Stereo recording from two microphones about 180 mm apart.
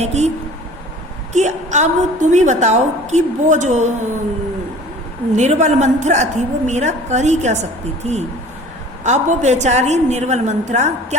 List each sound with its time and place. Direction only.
0.0 s a woman's voice: 40° right (ahead or behind)
1.3 s a woman's voice: 40° right (ahead or behind)
5.4 s a woman's voice: 40° right (ahead or behind)